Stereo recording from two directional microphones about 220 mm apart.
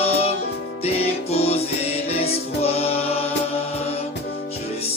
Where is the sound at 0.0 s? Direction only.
25° left (ahead or behind).